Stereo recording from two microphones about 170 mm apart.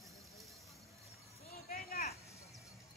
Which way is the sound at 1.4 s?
40° left (ahead or behind).